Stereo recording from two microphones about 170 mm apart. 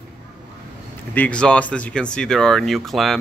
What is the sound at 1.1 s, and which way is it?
Speech, 10° left (ahead or behind).